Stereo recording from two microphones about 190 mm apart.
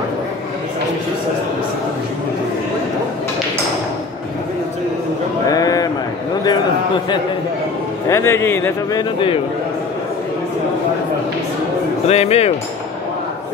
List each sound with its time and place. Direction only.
5.5 s a sound: 20° left (ahead or behind)
8.1 s a man's voice: 15° left (ahead or behind)
12.1 s speech: 35° left (ahead or behind)